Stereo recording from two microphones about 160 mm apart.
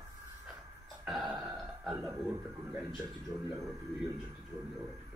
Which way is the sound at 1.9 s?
15° right (ahead or behind).